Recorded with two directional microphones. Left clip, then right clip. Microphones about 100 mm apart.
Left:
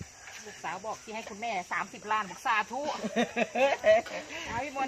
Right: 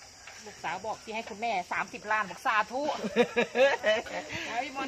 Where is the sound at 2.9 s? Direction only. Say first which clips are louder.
Right 3 dB; centre (ahead or behind).